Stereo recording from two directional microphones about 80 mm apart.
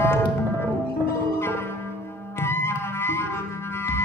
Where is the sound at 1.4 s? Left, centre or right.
Left.